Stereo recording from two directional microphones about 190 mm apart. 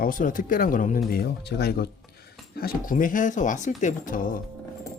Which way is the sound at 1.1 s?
55° left (ahead or behind).